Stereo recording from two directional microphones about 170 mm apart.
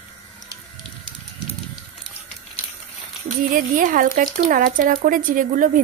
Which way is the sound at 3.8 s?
50° right (ahead or behind).